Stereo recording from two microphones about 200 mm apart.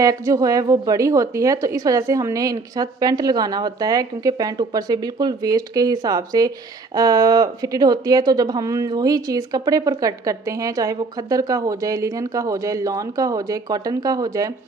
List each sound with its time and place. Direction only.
0.0 s speech: 15° right (ahead or behind)